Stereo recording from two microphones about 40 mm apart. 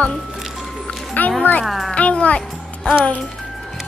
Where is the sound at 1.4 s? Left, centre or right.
Left.